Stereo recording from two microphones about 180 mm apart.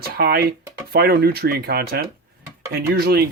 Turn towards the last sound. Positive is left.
turn(degrees=-60)  # may be behind; listen again after turning